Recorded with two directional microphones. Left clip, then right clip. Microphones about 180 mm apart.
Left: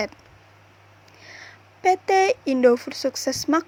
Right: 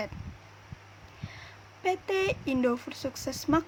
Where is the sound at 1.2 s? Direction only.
30° left (ahead or behind).